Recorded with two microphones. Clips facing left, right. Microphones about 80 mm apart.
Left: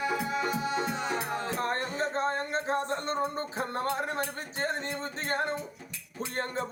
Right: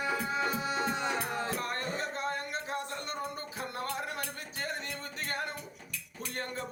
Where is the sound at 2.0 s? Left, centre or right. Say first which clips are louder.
Left 5 dB; left.